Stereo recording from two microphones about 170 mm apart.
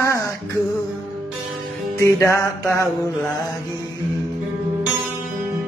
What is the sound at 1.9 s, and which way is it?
Music, 15° left (ahead or behind).